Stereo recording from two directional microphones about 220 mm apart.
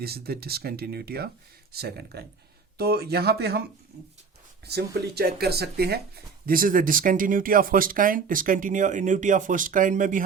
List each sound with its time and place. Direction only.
0.0 s speech: 45° right (ahead or behind)
4.7 s speech: 45° right (ahead or behind)